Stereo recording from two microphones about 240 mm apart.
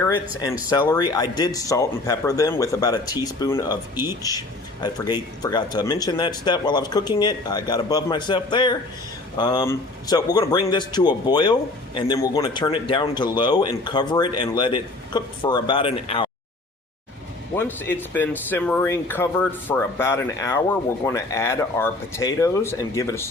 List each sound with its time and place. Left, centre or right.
0.7 s speech: centre
17.5 s speech: centre